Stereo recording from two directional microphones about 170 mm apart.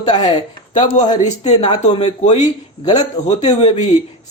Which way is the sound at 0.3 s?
25° left (ahead or behind).